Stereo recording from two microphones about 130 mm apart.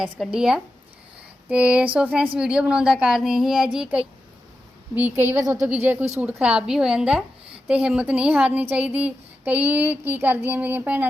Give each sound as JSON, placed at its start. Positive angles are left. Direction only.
{"t": 0.0, "sound": "speech", "side_deg": -5}